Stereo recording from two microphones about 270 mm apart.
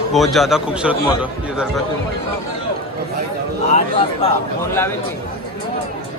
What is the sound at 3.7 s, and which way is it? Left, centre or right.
Speech, left.